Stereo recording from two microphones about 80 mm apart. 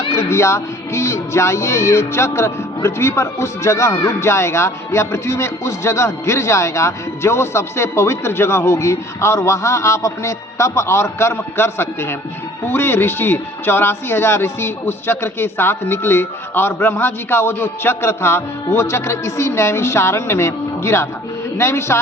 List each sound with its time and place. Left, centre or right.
0.1 s music: left